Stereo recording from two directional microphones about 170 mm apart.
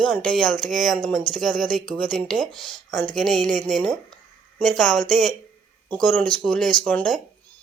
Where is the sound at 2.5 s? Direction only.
30° left (ahead or behind).